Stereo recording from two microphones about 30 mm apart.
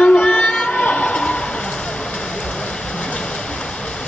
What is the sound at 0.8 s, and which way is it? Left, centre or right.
Vehicle, left.